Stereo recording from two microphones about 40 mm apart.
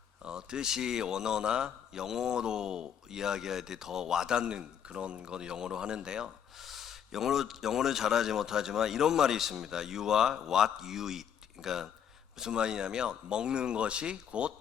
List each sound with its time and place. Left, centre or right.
0.3 s a man's voice: centre
6.6 s a man's voice: centre
12.4 s speech: right